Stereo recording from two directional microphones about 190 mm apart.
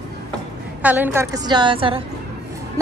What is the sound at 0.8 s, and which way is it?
A woman's voice, 10° right (ahead or behind).